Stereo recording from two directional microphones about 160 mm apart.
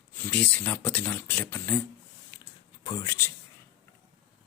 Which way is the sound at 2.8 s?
25° left (ahead or behind).